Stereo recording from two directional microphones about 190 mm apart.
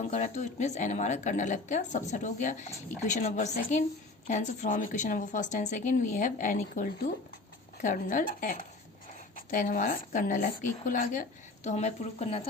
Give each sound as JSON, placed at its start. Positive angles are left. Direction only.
{"t": 0.1, "sound": "a woman's voice", "side_deg": 35}